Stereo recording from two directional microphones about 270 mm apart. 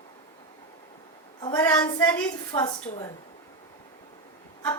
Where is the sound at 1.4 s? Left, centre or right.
Centre.